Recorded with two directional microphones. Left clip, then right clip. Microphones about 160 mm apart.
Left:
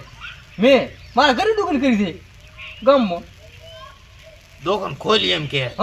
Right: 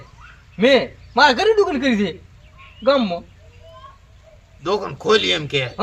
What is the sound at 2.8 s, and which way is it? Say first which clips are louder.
Speech: left 2 dB; 30° right (ahead or behind).